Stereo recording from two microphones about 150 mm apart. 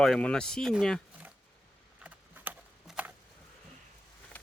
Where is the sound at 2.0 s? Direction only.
10° right (ahead or behind).